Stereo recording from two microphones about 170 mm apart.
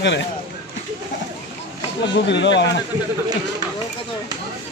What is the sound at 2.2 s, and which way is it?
Speech, 90° left.